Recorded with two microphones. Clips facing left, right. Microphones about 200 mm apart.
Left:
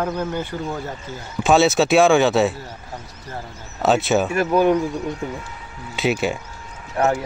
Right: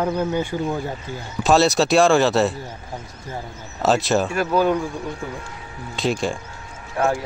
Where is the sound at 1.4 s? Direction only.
Centre (ahead or behind).